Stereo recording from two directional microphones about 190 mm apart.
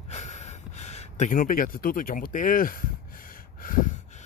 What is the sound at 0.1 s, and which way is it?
Gasp, 35° left (ahead or behind).